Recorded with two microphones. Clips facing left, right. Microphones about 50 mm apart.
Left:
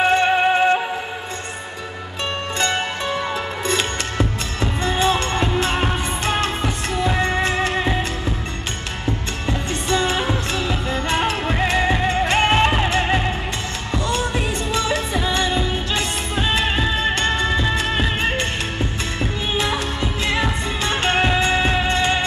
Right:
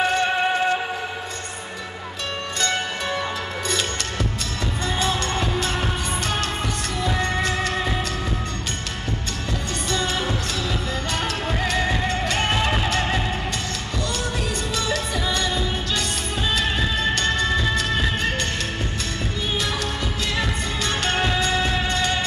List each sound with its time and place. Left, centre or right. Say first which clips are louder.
0.0 s music: left 4 dB; left
3.6 s music: left 4 dB; left
9.5 s music: left 5 dB; left
19.5 s music: left 4 dB; centre